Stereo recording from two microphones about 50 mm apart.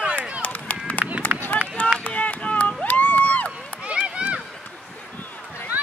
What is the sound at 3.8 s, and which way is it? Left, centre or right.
Run, right.